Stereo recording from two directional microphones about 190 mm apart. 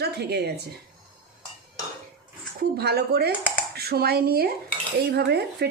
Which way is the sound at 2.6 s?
55° right (ahead or behind).